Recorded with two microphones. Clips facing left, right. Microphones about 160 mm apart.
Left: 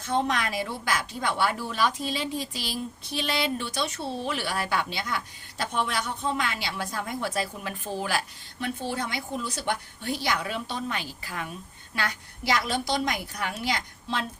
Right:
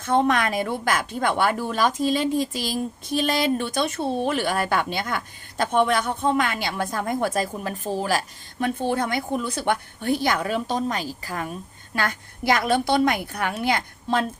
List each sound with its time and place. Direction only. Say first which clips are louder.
0.0 s a woman's voice: right 6 dB; 55° right (ahead or behind)